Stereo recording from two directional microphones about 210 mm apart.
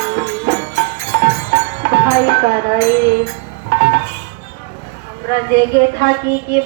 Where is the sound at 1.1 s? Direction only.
50° right (ahead or behind).